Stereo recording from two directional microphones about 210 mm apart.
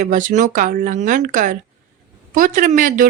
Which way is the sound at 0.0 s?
40° right (ahead or behind).